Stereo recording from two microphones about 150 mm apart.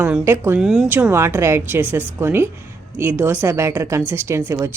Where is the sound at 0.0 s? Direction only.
10° right (ahead or behind).